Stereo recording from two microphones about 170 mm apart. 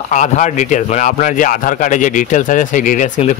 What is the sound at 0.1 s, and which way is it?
A man's voice, 45° left (ahead or behind).